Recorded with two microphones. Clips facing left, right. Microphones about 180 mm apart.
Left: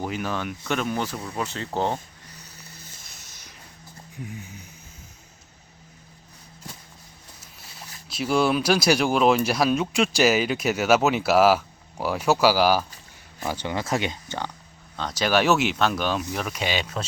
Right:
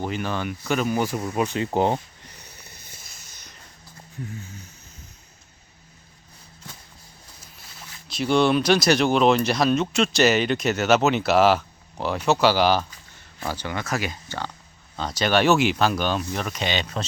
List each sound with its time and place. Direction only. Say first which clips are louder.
0.0 s speech: right 1 dB; centre (ahead or behind); by 2.0 s 15° right (ahead or behind)
2.5 s a sound: left 1 dB; 20° right (ahead or behind)
3.1 s a sound: even; 5° left (ahead or behind)
4.2 s speech: right 1 dB; 15° left (ahead or behind)
8.0 s speech: right 2 dB; 5° left (ahead or behind)
13.6 s speech: left 3 dB; 25° left (ahead or behind)
14.9 s speech: right 1 dB; centre (ahead or behind)